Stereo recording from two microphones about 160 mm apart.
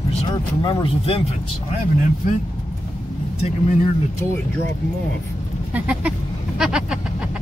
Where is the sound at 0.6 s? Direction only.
30° left (ahead or behind).